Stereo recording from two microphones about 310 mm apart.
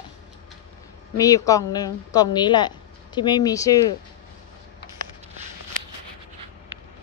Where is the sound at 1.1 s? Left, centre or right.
Centre.